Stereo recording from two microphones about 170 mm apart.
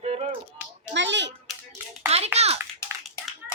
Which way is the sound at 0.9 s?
90° right.